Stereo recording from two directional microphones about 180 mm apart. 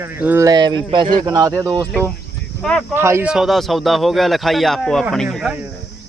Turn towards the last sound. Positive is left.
turn(degrees=0)  # may be behind; listen again after turning